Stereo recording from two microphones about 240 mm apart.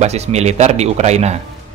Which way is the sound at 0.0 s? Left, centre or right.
Right.